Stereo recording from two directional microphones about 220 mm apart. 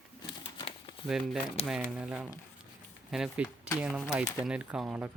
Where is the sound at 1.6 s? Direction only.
5° right (ahead or behind).